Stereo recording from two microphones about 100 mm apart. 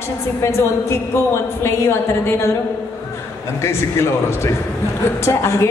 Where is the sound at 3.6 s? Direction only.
25° left (ahead or behind).